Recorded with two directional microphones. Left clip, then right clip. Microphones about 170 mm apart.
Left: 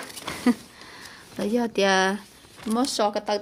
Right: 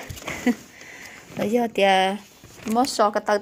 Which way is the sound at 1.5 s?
10° left (ahead or behind).